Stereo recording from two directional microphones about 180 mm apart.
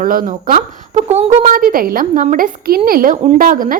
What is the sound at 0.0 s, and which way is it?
A woman's voice, 50° right (ahead or behind).